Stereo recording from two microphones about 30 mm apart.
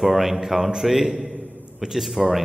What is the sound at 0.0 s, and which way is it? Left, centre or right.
A man's voice, centre.